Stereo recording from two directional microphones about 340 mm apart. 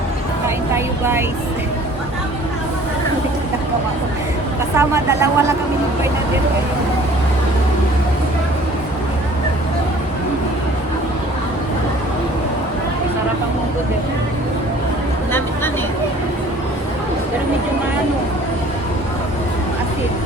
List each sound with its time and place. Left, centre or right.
4.8 s speech: centre